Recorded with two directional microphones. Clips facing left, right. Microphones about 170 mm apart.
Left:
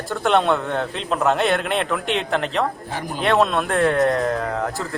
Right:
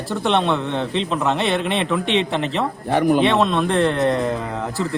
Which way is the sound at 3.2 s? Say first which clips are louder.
Right 1 dB; centre (ahead or behind).